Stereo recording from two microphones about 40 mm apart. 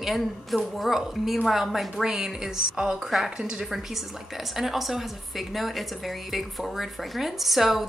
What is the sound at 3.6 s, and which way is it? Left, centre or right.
A woman's voice, centre.